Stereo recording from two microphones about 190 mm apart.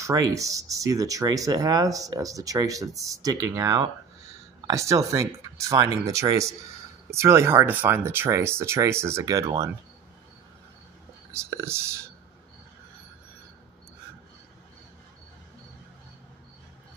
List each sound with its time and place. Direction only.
0.0 s speech: 15° right (ahead or behind)
11.3 s speech: 15° right (ahead or behind)